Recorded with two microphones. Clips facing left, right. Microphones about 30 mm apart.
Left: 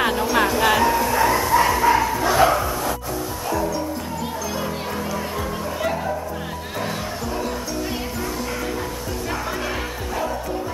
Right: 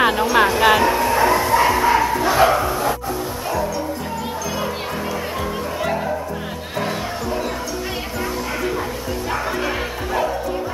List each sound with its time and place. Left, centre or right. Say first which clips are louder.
0.0 s music: right 4 dB; centre
0.4 s bow-wow: right 3 dB; centre
5.8 s music: right 1 dB; centre